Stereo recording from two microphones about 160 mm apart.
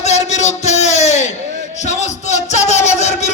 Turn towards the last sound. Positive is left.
turn(degrees=45)  # may be behind; listen again after turning